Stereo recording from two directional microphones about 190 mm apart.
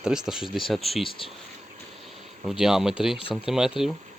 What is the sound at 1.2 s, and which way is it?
Speech, 30° left (ahead or behind).